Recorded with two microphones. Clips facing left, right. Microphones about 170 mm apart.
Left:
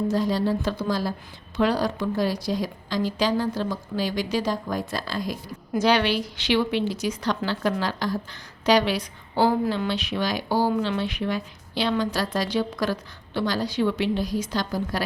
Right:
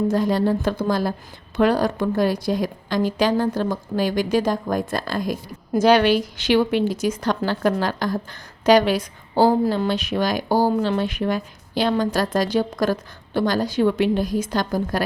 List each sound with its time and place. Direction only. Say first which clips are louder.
0.1 s a woman's voice: right 4 dB; 55° right (ahead or behind)